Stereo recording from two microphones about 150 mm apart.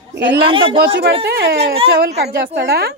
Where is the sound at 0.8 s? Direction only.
90° right.